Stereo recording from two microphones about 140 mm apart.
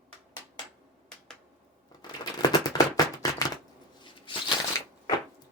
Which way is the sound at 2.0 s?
30° left (ahead or behind).